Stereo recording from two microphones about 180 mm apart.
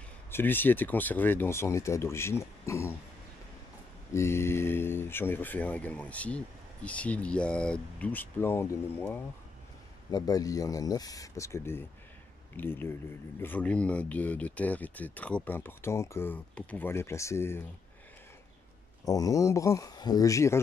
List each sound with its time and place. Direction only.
0.3 s speech: 10° left (ahead or behind)
4.1 s speech: 15° left (ahead or behind)
19.0 s speech: 20° left (ahead or behind)